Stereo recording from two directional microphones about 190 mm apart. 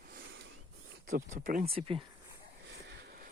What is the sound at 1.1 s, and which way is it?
Speech, 45° right (ahead or behind).